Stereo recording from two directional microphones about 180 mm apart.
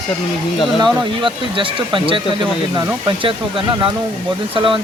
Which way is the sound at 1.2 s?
30° right (ahead or behind).